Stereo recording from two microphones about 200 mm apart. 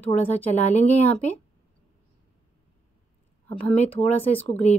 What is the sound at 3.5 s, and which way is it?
Speech, 30° left (ahead or behind).